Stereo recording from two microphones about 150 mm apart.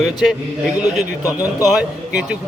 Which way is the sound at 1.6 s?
5° right (ahead or behind).